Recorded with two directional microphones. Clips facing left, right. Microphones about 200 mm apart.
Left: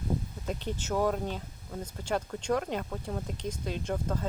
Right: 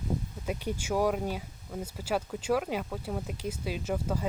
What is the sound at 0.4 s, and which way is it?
Speech, 10° right (ahead or behind).